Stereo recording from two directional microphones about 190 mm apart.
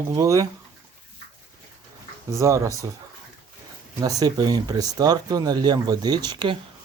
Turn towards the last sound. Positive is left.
turn(degrees=-25)  # may be behind; listen again after turning